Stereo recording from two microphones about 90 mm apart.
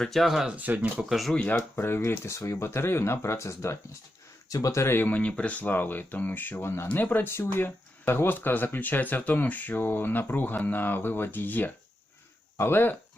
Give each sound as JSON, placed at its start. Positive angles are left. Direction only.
{"t": 0.0, "sound": "speech", "side_deg": 0}
{"t": 0.5, "sound": "speech", "side_deg": -15}
{"t": 1.1, "sound": "speech", "side_deg": 0}
{"t": 1.4, "sound": "speech", "side_deg": 10}
{"t": 1.7, "sound": "speech", "side_deg": 25}